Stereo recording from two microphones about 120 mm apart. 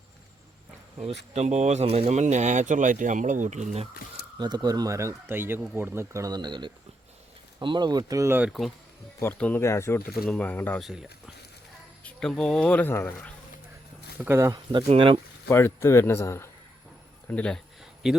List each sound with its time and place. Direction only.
0.9 s speech: 65° right (ahead or behind); by 3.8 s 80° right
4.4 s speech: 35° right (ahead or behind)
8.4 s speech: centre (ahead or behind)
9.4 s a man's voice: 15° left (ahead or behind)
10.2 s speech: 10° left (ahead or behind)
10.8 s speech: centre (ahead or behind)
12.0 s speech: 5° left (ahead or behind)
14.2 s speech: 20° right (ahead or behind)
14.5 s speech: 40° right (ahead or behind)
15.4 s a man's voice: 20° left (ahead or behind)
17.2 s speech: 10° left (ahead or behind)
17.7 s a sound: 5° right (ahead or behind)